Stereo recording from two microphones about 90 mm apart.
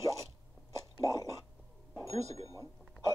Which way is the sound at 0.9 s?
40° left (ahead or behind).